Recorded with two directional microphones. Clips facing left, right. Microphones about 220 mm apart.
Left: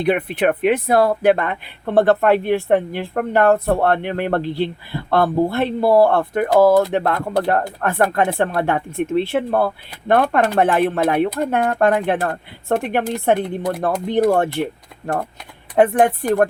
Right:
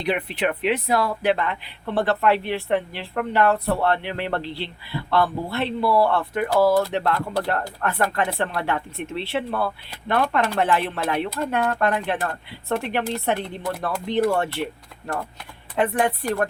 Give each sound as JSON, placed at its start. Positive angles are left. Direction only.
{"t": 0.0, "sound": "speech", "side_deg": 55}